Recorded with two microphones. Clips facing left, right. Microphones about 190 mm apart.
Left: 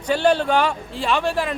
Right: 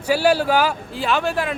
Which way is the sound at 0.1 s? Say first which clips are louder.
Right 1 dB; 5° right (ahead or behind).